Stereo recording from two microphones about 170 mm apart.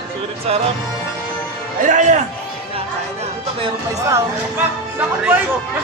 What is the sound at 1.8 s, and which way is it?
Speech, 45° right (ahead or behind).